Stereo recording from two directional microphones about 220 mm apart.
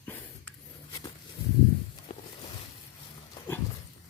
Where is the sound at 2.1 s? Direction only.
30° left (ahead or behind).